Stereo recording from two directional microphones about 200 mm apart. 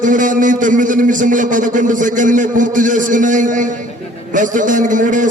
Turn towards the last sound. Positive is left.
turn(degrees=-40)  # may be behind; listen again after turning